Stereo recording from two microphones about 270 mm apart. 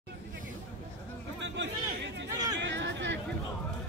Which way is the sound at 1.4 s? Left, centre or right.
Right.